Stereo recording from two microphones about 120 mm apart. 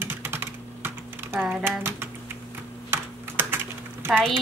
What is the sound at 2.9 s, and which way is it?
Typing, 20° right (ahead or behind).